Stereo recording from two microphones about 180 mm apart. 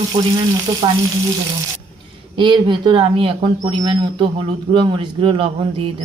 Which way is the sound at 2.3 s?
25° right (ahead or behind).